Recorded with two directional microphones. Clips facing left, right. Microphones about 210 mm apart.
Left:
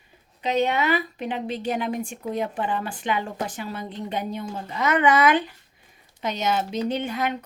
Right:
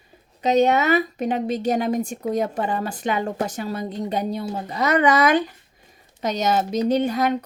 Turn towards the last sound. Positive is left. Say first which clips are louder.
# right 6 dB
turn(degrees=-40)  # may be behind; listen again after turning